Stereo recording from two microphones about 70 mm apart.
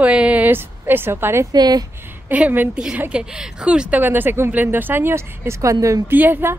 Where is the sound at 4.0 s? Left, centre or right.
Right.